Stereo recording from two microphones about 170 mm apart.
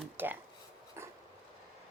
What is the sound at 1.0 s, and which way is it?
Dog, 15° right (ahead or behind).